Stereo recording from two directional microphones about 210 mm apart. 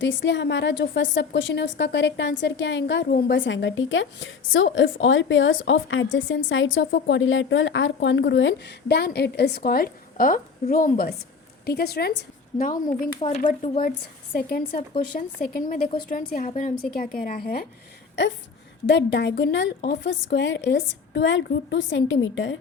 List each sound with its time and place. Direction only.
0.0 s a woman's voice: 60° left (ahead or behind); by 13.7 s 35° left (ahead or behind)
14.3 s speech: 50° left (ahead or behind)
18.9 s a woman's voice: 55° left (ahead or behind)